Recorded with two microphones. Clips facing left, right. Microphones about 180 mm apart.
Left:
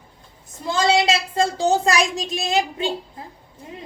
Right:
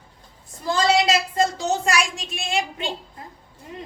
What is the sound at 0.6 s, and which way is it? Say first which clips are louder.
A woman's voice: left 1 dB; 25° left (ahead or behind).